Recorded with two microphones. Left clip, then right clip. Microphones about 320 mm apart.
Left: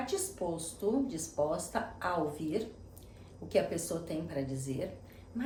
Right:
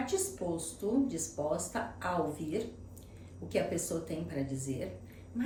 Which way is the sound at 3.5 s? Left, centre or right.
Centre.